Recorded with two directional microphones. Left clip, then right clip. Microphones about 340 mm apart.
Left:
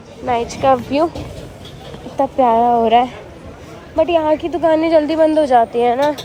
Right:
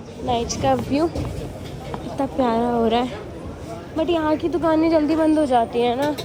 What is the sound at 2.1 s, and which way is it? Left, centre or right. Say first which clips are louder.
Speech: left 8 dB; left.